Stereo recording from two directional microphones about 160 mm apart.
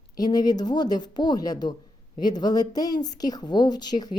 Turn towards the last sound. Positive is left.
turn(degrees=25)  # may be behind; listen again after turning